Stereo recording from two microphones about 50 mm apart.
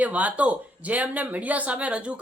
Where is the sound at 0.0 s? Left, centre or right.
Right.